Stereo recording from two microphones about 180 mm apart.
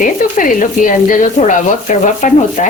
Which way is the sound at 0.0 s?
45° left (ahead or behind).